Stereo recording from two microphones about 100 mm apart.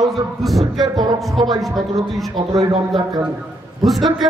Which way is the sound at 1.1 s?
Centre (ahead or behind).